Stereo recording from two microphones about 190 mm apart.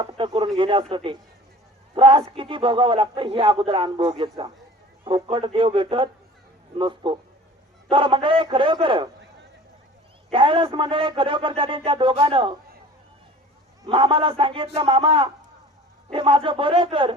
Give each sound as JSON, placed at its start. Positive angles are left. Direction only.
{"t": 0.0, "sound": "a man's voice", "side_deg": -25}
{"t": 10.3, "sound": "a man's voice", "side_deg": -25}
{"t": 13.8, "sound": "a man's voice", "side_deg": -25}